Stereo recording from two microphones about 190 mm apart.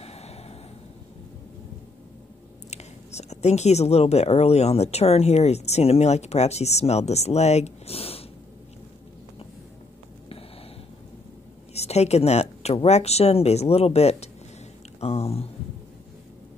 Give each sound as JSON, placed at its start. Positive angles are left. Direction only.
{"t": 0.0, "sound": "vehicle", "side_deg": 35}
{"t": 2.7, "sound": "speech", "side_deg": 35}
{"t": 11.7, "sound": "speech", "side_deg": 35}